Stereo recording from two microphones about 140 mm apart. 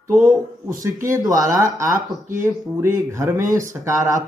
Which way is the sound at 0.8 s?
20° right (ahead or behind).